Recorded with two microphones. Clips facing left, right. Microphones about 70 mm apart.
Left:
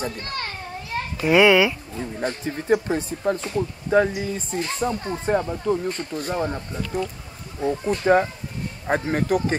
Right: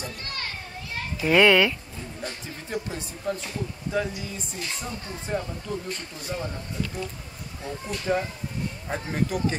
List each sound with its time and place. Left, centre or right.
0.0 s children playing: left
1.2 s a child's voice: centre
2.1 s speech: left